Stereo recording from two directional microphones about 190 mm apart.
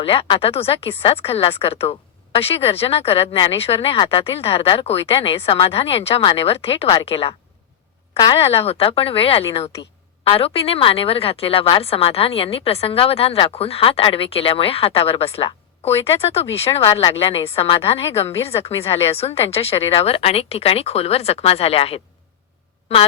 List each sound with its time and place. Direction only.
0.0 s speech: 30° left (ahead or behind)